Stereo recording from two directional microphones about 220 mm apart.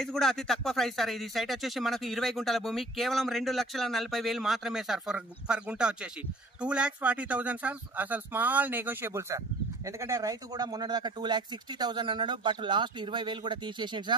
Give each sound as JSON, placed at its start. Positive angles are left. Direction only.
{"t": 0.0, "sound": "speech", "side_deg": 0}